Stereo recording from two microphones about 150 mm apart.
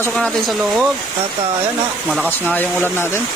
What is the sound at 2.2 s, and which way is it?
Speech, 10° left (ahead or behind).